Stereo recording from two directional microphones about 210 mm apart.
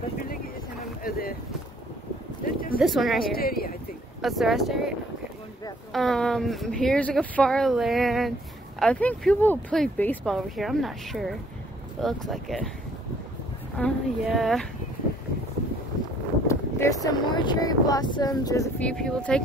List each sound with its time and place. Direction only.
1.0 s boat: 45° left (ahead or behind)
2.4 s a sound: 40° left (ahead or behind)
2.8 s speech: centre (ahead or behind)
3.3 s speech: 45° left (ahead or behind)
4.2 s speech: centre (ahead or behind)
5.9 s speech: centre (ahead or behind)
13.7 s speech: centre (ahead or behind)
16.4 s speech: 15° left (ahead or behind)